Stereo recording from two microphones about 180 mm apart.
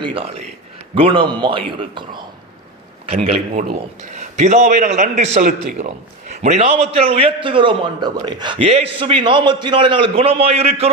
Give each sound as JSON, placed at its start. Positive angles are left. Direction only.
{"t": 0.0, "sound": "a man's voice", "side_deg": -30}